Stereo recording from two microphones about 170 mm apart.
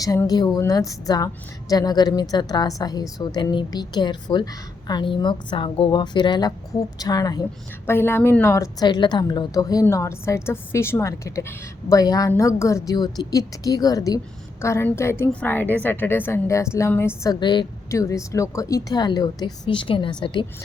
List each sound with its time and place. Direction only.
0.0 s a woman's voice: 20° left (ahead or behind)
17.4 s speech: 25° left (ahead or behind)